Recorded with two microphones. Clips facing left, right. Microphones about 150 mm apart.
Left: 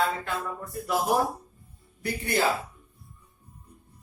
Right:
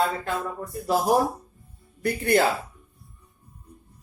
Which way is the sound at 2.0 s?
60° right (ahead or behind).